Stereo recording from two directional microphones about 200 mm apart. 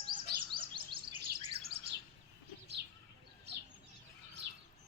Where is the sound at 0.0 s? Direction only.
25° right (ahead or behind).